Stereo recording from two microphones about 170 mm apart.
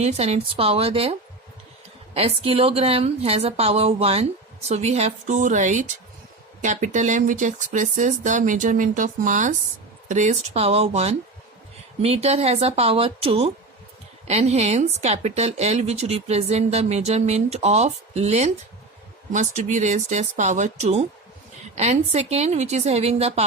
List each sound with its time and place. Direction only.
0.0 s speech: 40° right (ahead or behind)
2.1 s speech: 35° right (ahead or behind)